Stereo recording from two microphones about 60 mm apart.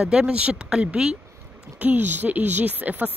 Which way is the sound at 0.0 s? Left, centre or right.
Centre.